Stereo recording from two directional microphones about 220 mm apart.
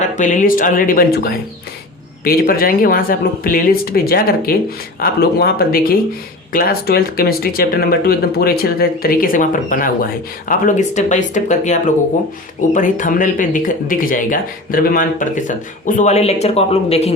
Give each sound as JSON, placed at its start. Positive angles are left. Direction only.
{"t": 0.0, "sound": "speech", "side_deg": 35}